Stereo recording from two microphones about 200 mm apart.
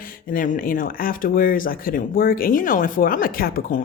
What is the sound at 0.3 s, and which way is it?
Speech, 45° left (ahead or behind).